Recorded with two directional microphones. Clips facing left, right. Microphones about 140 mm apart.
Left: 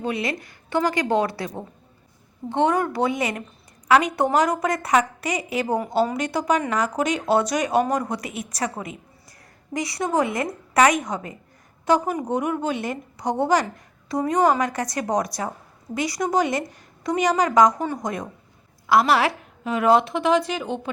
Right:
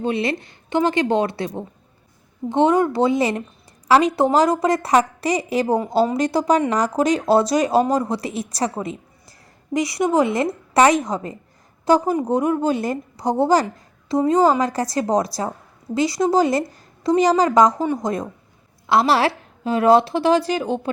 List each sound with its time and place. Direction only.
0.0 s a woman's voice: 25° right (ahead or behind)